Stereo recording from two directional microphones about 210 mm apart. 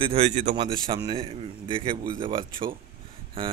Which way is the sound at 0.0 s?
30° right (ahead or behind).